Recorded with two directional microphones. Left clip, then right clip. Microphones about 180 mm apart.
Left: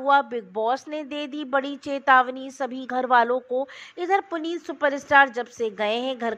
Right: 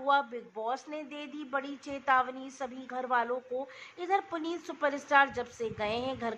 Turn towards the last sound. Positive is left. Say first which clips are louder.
# left 8 dB
turn(degrees=30)  # may be behind; listen again after turning